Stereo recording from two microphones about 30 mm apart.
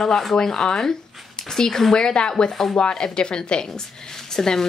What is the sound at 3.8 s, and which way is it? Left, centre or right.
Speech, centre.